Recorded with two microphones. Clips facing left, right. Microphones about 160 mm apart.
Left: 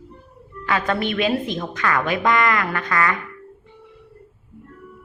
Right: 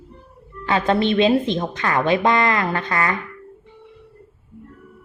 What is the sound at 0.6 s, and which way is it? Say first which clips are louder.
Speech: right 4 dB; 25° right (ahead or behind).